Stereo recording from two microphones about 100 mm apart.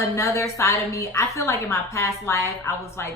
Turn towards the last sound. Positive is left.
turn(degrees=25)  # may be behind; listen again after turning